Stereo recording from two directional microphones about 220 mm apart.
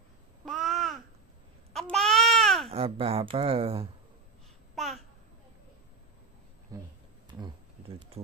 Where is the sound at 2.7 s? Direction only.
25° right (ahead or behind).